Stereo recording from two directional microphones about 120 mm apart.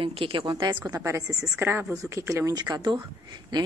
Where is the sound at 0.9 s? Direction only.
25° right (ahead or behind).